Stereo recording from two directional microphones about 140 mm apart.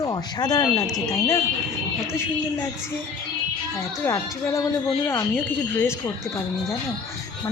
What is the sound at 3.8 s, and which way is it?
A woman's voice, 20° left (ahead or behind).